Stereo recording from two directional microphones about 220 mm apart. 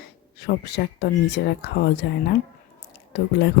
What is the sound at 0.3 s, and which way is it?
Speech, 45° left (ahead or behind).